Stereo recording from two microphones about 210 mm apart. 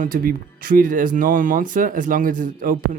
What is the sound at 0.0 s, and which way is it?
Speech, 45° right (ahead or behind).